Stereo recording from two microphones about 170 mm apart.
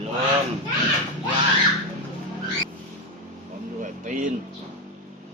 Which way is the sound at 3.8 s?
50° right (ahead or behind).